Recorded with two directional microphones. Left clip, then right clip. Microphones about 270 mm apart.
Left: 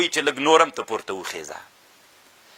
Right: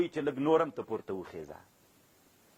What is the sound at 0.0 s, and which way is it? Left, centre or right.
Speech, centre.